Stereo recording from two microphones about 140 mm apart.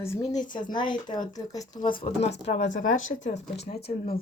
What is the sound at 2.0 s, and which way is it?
Speech, 50° left (ahead or behind).